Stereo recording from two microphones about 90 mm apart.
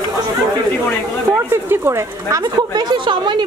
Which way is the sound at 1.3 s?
25° right (ahead or behind).